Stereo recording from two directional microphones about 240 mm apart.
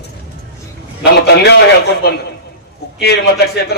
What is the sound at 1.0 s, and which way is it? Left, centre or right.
Speech, left.